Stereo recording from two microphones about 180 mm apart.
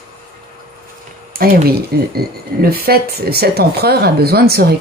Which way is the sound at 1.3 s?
55° right (ahead or behind).